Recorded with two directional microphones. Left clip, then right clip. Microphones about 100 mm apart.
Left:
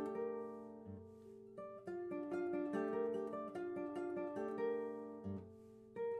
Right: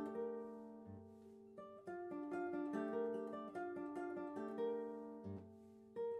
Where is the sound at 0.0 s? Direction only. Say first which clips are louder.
Left 3 dB; 15° left (ahead or behind).